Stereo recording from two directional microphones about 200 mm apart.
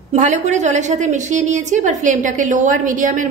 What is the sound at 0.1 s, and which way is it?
A woman's voice, 35° right (ahead or behind).